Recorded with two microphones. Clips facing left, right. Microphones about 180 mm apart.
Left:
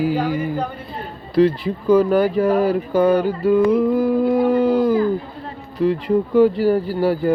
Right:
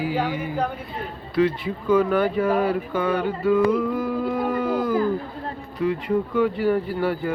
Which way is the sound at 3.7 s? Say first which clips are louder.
Left 7 dB; 35° left (ahead or behind).